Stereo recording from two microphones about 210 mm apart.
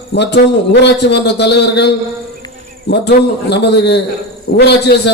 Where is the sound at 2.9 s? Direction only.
50° left (ahead or behind).